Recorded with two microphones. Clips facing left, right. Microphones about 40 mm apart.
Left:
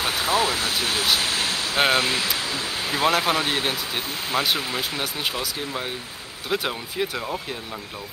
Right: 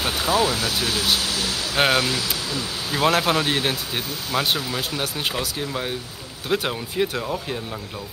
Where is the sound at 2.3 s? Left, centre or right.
Left.